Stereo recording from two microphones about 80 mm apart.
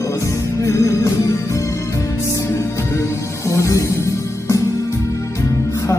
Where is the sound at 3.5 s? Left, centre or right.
Left.